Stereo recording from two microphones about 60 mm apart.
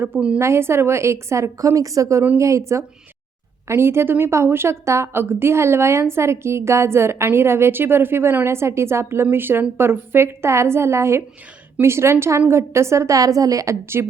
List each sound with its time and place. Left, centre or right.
0.3 s a woman's voice: right
3.7 s a woman's voice: right
13.8 s a woman's voice: right